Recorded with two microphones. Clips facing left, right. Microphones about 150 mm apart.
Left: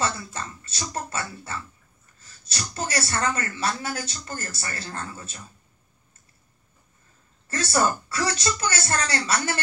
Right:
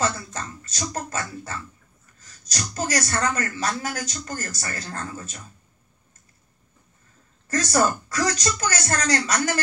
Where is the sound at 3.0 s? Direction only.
40° right (ahead or behind).